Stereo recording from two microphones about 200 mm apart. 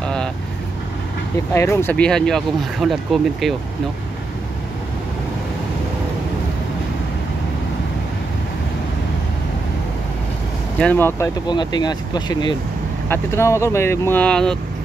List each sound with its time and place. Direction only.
0.0 s vehicle: 5° left (ahead or behind)
1.5 s speech: 10° left (ahead or behind)
10.8 s speech: 10° left (ahead or behind)